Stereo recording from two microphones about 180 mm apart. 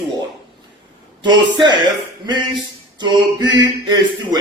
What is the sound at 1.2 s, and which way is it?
Speech, 25° right (ahead or behind).